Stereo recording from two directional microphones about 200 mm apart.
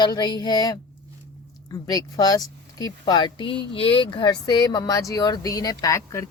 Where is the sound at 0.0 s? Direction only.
20° left (ahead or behind).